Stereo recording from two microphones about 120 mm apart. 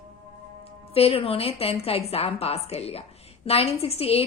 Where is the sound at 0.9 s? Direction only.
55° left (ahead or behind).